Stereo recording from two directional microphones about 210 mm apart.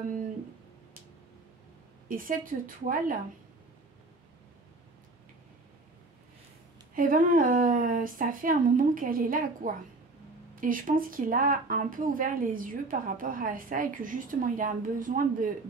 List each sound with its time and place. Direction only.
2.0 s speech: 40° right (ahead or behind)
7.0 s speech: 40° right (ahead or behind)